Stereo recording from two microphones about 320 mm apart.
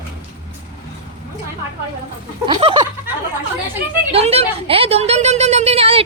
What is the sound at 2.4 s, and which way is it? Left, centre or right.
Speech, centre.